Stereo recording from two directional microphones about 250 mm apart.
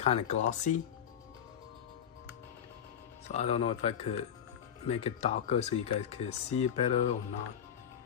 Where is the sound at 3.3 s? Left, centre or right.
Left.